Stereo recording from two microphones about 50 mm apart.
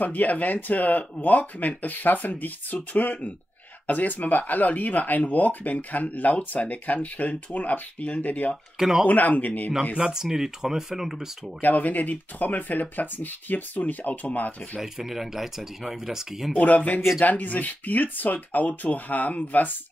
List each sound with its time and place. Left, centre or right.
0.0 s speech: left
8.7 s speech: centre
9.0 s speech: left
9.9 s speech: centre
11.6 s speech: left
14.8 s speech: centre
16.5 s speech: left